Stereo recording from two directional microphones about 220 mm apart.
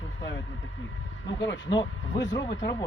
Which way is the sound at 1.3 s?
55° left (ahead or behind).